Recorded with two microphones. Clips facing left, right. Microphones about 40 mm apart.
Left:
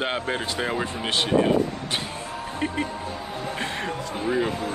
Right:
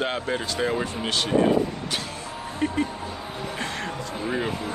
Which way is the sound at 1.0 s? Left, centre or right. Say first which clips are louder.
Left 3 dB; left.